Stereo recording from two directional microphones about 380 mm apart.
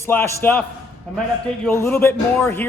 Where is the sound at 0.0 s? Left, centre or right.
Centre.